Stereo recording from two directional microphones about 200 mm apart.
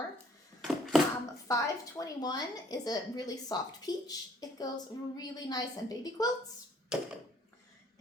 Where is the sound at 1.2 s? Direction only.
15° left (ahead or behind).